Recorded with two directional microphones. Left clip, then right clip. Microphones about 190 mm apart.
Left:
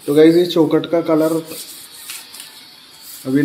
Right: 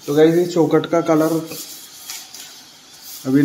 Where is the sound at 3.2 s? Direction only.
Centre (ahead or behind).